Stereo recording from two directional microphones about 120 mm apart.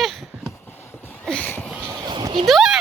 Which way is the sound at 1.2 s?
10° left (ahead or behind).